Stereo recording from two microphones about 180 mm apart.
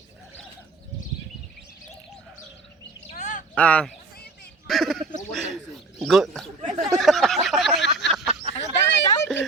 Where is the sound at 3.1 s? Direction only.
45° left (ahead or behind).